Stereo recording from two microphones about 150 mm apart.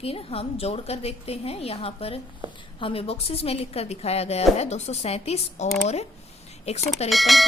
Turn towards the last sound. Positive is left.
turn(degrees=0)  # may be behind; listen again after turning